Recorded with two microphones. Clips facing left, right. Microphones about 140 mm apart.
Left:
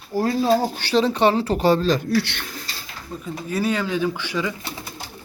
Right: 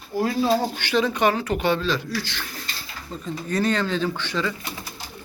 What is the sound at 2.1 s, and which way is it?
Speech, 65° left (ahead or behind).